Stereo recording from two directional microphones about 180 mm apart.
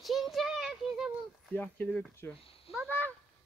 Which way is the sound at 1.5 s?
10° left (ahead or behind).